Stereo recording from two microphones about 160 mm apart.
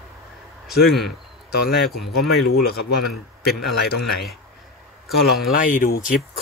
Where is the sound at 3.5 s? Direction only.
80° left.